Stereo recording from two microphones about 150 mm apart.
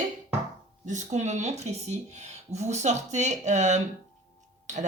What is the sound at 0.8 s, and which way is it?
Speech, 55° right (ahead or behind).